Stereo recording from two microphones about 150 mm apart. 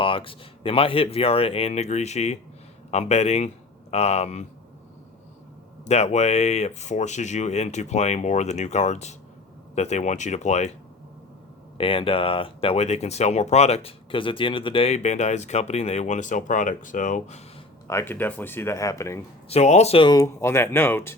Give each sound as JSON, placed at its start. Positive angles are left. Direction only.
{"t": 0.0, "sound": "speech", "side_deg": 35}
{"t": 5.8, "sound": "speech", "side_deg": 45}
{"t": 11.8, "sound": "speech", "side_deg": 35}
{"t": 17.8, "sound": "speech", "side_deg": 15}
{"t": 19.5, "sound": "speech", "side_deg": 50}
{"t": 20.1, "sound": "speech", "side_deg": 20}